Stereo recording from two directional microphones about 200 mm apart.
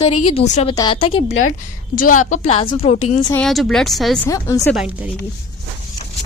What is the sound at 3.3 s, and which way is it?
Speech, centre (ahead or behind).